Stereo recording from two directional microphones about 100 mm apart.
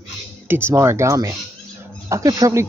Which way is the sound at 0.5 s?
25° right (ahead or behind).